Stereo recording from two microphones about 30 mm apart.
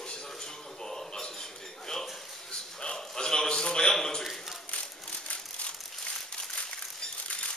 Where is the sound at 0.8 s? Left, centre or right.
Centre.